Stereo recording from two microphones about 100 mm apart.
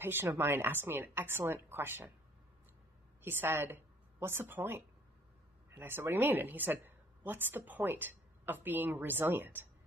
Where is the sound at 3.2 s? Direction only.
20° right (ahead or behind).